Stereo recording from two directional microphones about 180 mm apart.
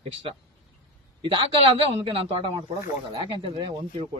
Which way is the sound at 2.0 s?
30° right (ahead or behind).